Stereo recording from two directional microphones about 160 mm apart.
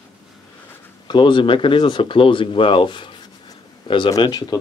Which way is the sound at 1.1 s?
30° left (ahead or behind).